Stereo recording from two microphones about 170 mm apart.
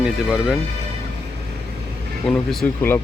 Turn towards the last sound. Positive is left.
turn(degrees=10)  # may be behind; listen again after turning